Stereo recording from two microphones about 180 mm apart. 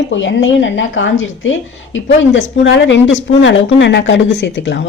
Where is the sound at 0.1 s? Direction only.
90° left.